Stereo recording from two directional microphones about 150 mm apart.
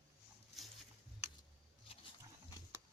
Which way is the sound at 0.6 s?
Centre (ahead or behind).